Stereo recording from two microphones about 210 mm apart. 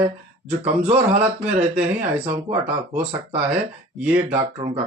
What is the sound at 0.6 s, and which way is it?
Speech, 30° right (ahead or behind).